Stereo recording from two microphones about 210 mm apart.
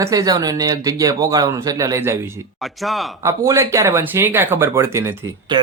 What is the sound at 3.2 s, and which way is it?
Speech, 15° right (ahead or behind).